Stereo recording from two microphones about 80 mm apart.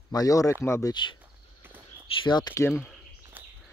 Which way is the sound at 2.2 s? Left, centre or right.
Left.